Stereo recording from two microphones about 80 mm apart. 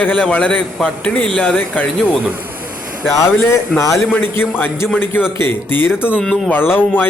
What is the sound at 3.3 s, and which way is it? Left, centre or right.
A man's voice, left.